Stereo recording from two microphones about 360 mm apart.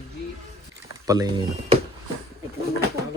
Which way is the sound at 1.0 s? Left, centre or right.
Centre.